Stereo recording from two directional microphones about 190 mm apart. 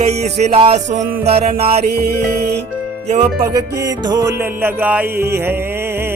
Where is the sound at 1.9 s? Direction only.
55° right (ahead or behind).